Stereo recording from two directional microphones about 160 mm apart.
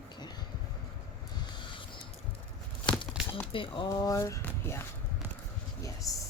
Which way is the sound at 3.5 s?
35° left (ahead or behind).